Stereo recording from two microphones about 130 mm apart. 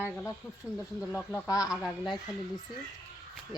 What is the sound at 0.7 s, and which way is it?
Speech, 5° right (ahead or behind).